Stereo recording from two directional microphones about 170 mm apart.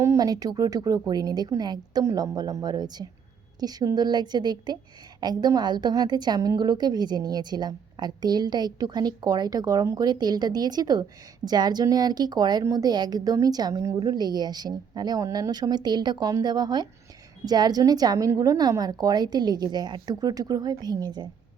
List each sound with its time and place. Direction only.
0.0 s a woman's voice: 20° right (ahead or behind)